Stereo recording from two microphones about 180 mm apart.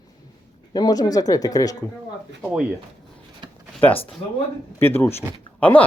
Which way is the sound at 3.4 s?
25° right (ahead or behind).